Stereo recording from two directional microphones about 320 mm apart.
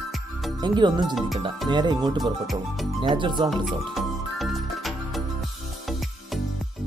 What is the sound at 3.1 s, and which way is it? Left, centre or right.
Speech, centre.